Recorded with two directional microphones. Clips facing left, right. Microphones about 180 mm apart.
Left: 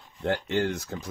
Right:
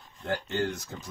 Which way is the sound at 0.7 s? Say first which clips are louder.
Left 5 dB; 65° left (ahead or behind).